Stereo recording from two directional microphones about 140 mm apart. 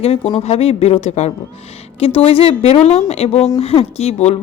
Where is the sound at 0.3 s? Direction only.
45° left (ahead or behind).